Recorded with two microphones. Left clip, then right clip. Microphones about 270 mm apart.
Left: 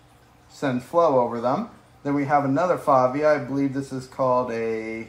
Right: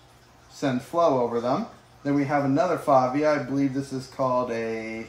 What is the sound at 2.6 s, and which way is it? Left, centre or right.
Speech, centre.